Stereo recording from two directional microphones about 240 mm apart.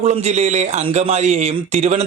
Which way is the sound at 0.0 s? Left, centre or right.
Right.